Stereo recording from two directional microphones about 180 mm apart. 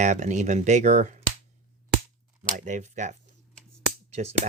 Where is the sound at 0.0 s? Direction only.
40° right (ahead or behind).